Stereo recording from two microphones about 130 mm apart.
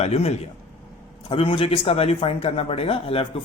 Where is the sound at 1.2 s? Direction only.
45° left (ahead or behind).